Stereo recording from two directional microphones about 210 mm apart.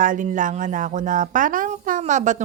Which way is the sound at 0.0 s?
40° right (ahead or behind).